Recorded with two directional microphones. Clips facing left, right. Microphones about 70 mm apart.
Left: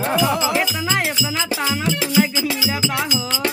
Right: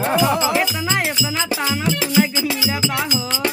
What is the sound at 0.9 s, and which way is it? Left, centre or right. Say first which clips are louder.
Music: even; centre.